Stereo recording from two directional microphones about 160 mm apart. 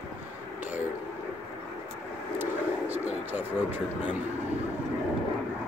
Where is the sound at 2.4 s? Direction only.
10° right (ahead or behind).